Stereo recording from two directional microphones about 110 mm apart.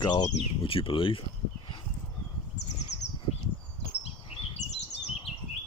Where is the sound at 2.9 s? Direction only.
75° left (ahead or behind).